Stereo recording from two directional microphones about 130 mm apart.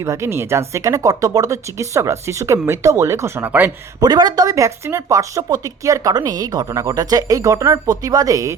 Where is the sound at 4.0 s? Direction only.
30° right (ahead or behind).